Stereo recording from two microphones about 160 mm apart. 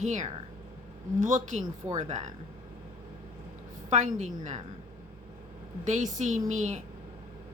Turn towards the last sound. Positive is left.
turn(degrees=-50)  # may be behind; listen again after turning